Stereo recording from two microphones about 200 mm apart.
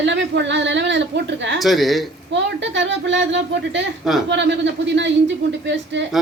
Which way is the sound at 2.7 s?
65° right (ahead or behind).